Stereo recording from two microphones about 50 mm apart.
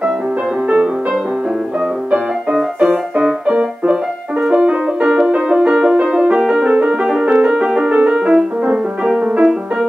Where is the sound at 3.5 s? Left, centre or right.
Right.